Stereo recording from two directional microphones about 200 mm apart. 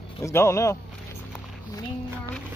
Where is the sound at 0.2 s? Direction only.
15° left (ahead or behind).